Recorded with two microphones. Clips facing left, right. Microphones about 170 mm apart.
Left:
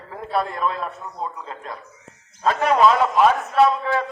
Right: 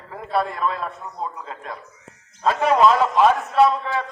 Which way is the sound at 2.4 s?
Centre (ahead or behind).